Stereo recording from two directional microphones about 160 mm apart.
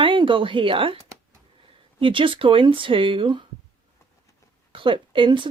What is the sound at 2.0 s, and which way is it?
Speech, 30° right (ahead or behind).